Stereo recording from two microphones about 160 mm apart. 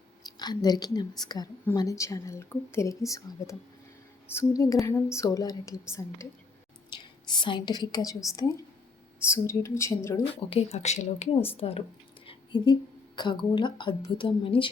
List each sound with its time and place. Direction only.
0.3 s a woman's voice: 25° left (ahead or behind)
4.4 s a woman's voice: 20° left (ahead or behind)
10.5 s speech: 40° left (ahead or behind)
12.2 s a sound: 30° left (ahead or behind)
13.2 s a woman's voice: 30° left (ahead or behind)